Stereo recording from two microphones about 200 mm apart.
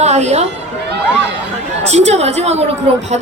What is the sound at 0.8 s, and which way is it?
Speech, 55° right (ahead or behind).